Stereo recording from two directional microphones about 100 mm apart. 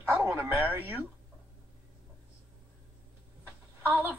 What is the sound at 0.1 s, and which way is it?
Speech, 20° right (ahead or behind).